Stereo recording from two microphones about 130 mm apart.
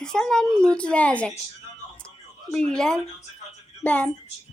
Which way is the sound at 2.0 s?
5° left (ahead or behind).